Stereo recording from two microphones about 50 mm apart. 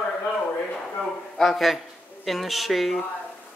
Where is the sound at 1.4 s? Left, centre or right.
Centre.